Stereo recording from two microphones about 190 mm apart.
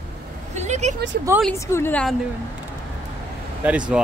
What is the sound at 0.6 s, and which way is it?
Vehicle, 35° right (ahead or behind).